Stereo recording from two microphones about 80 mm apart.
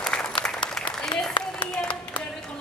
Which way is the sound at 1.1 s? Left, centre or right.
Left.